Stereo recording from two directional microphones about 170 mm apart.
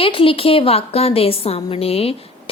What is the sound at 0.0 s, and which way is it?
A woman's voice, 30° left (ahead or behind).